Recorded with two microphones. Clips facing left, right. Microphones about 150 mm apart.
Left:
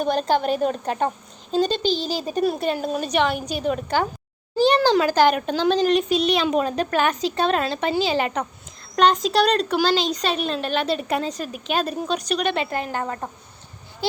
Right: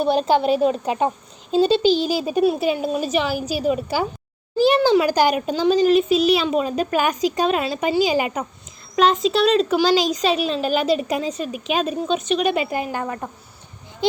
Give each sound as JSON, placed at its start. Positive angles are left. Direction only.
{"t": 0.1, "sound": "a child's voice", "side_deg": -10}